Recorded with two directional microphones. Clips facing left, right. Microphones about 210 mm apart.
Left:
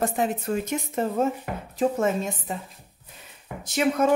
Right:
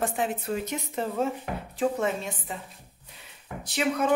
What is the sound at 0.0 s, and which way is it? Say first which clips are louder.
Speech: left 3 dB; 40° left (ahead or behind).